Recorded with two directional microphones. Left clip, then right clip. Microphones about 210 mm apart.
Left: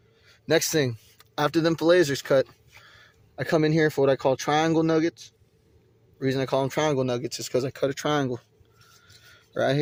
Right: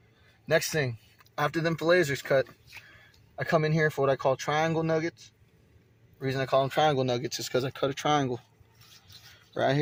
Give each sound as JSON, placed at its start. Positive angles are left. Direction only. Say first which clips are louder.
{"t": 0.4, "sound": "speech", "louder": "left 4 dB", "side_deg": 65}
{"t": 6.7, "sound": "speech", "louder": "even", "side_deg": 30}